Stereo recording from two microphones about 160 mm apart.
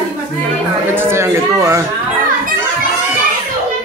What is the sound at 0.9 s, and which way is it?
Speech, 15° right (ahead or behind).